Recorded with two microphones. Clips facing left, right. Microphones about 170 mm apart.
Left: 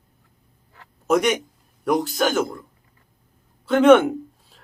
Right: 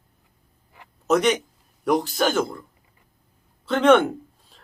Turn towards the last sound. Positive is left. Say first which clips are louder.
# left 3 dB
turn(degrees=5)  # may be behind; listen again after turning